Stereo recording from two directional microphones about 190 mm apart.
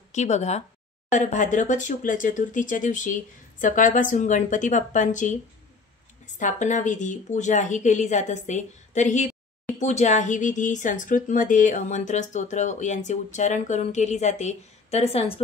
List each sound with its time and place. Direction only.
0.1 s speech: 35° left (ahead or behind)